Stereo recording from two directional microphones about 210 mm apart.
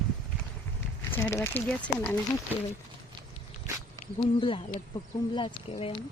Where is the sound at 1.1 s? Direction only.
10° left (ahead or behind).